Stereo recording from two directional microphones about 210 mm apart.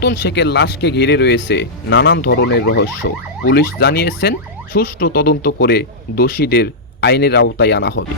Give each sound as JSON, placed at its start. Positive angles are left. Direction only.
{"t": 0.0, "sound": "speech", "side_deg": 50}